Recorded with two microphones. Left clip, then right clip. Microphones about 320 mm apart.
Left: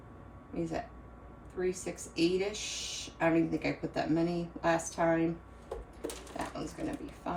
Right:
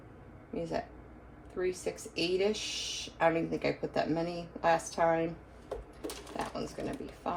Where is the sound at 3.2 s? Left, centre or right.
Centre.